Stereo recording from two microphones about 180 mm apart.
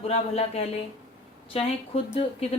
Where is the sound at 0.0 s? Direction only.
35° left (ahead or behind).